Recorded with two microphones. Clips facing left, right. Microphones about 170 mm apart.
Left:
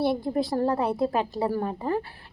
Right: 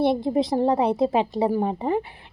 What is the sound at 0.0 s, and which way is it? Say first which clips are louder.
A woman's voice: right 4 dB; 20° right (ahead or behind).